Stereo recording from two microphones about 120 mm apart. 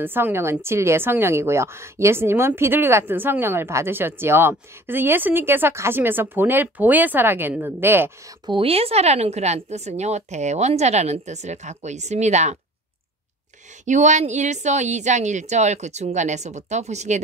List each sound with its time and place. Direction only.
0.0 s a woman's voice: 20° right (ahead or behind)
8.5 s speech: 50° right (ahead or behind); by 12.5 s 75° right (ahead or behind)
13.8 s speech: 85° right